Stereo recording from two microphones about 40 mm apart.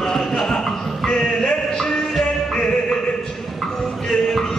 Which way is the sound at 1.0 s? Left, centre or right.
Left.